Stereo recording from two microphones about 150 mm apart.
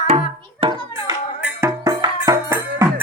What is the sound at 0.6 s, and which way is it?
Hands, 40° right (ahead or behind).